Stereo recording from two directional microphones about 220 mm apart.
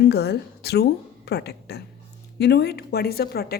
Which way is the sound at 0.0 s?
45° left (ahead or behind).